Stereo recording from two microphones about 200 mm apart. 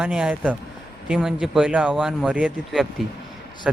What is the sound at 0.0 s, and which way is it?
A man's voice, 5° right (ahead or behind).